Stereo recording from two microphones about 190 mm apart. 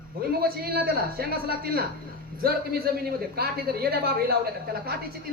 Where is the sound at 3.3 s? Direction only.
55° right (ahead or behind).